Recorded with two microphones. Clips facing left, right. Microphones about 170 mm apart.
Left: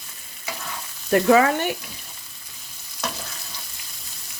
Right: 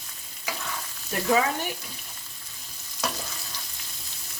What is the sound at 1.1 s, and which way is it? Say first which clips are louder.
Frying: left 8 dB; 70° left (ahead or behind).